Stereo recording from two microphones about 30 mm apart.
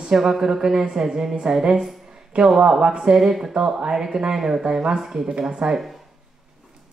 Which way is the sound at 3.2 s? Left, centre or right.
Centre.